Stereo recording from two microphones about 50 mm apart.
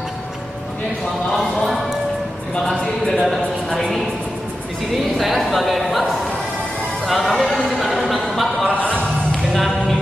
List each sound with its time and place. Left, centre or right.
1.3 s music: centre
2.6 s speech: centre
5.1 s a man's voice: centre
8.7 s music: left
9.3 s music: centre